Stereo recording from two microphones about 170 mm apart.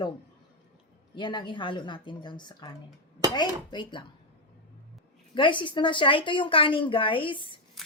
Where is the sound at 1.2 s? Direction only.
25° left (ahead or behind).